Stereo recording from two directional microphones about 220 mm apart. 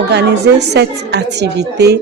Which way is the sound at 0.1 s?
50° right (ahead or behind).